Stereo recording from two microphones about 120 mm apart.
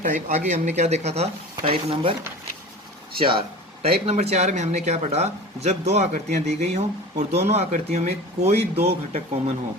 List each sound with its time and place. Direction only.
0.0 s speech: 90° right; by 2.1 s 55° right (ahead or behind)
3.2 s speech: 45° right (ahead or behind)
4.0 s speech: 60° right (ahead or behind)